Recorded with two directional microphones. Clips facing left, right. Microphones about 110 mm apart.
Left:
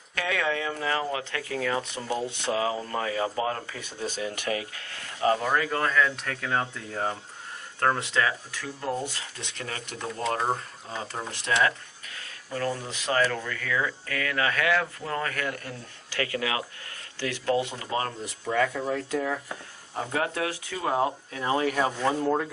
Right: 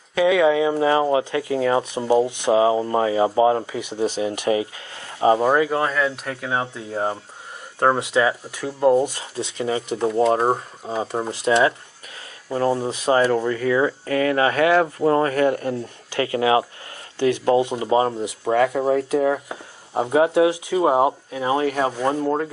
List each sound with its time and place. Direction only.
0.2 s speech: 15° right (ahead or behind)
5.5 s speech: 15° right (ahead or behind)
10.4 s speech: 35° right (ahead or behind)
10.9 s speech: 15° right (ahead or behind)
12.9 s speech: 20° right (ahead or behind)